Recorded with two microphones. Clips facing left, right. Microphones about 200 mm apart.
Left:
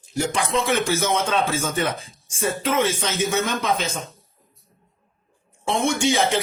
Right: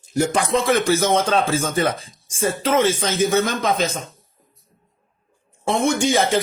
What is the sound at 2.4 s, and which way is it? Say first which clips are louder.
Speech: right 3 dB; 30° right (ahead or behind).